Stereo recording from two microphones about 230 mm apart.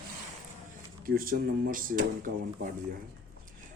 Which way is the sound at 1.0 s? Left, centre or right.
Right.